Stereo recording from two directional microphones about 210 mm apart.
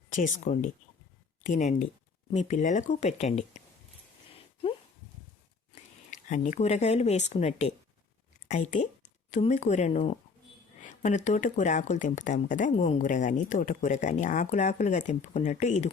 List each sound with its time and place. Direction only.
0.1 s speech: 35° left (ahead or behind)
6.1 s speech: 35° left (ahead or behind)